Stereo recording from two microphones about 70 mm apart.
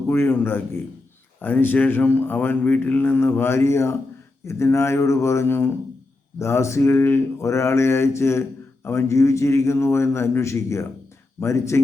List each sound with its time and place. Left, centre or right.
0.1 s speech: left
6.4 s mantra: left
11.3 s speech: left